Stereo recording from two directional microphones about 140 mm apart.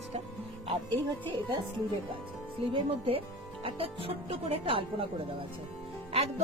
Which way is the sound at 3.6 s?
40° right (ahead or behind).